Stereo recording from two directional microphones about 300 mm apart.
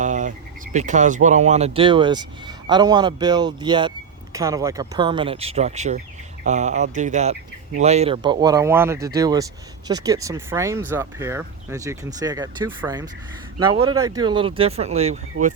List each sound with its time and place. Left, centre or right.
0.0 s speech: right